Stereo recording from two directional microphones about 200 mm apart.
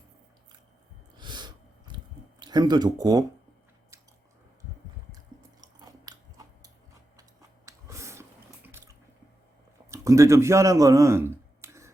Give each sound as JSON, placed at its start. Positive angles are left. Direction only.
{"t": 1.1, "sound": "a sound", "side_deg": -20}
{"t": 2.4, "sound": "speech", "side_deg": -20}
{"t": 5.5, "sound": "chewing", "side_deg": -20}
{"t": 7.2, "sound": "water", "side_deg": -15}
{"t": 9.9, "sound": "a man's voice", "side_deg": -15}